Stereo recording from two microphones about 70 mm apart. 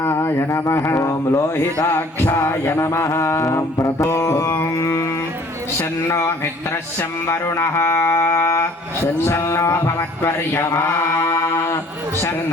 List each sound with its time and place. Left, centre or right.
0.0 s speech: left
4.8 s music: left
6.1 s speech: left